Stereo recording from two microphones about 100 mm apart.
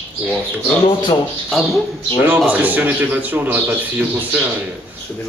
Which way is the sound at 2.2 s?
15° right (ahead or behind).